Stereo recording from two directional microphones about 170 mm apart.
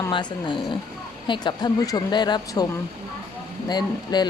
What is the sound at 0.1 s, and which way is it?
A woman's voice, 25° left (ahead or behind).